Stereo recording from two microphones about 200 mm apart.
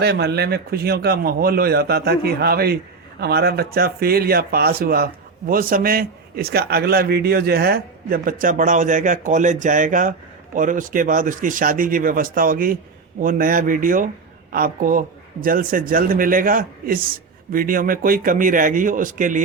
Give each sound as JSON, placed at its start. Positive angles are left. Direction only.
{"t": 0.0, "sound": "a man's voice", "side_deg": -55}